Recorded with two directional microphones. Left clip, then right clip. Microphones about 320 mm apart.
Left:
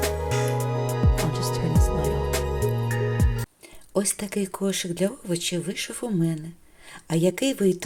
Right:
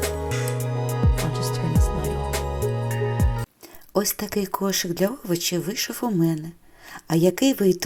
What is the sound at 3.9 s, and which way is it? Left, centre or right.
Speech, centre.